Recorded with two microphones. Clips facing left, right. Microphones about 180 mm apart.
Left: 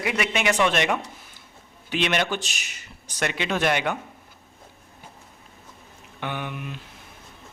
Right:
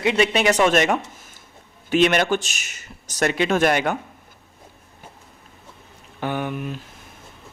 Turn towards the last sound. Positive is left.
turn(degrees=-40)  # may be behind; listen again after turning